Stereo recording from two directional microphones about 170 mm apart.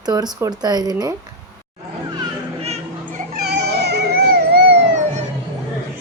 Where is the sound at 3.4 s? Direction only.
75° right (ahead or behind).